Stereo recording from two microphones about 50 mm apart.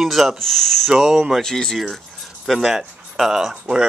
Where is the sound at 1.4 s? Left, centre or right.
Centre.